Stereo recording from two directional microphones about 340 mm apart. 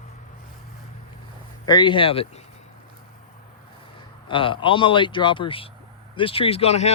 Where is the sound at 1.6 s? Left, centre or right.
Centre.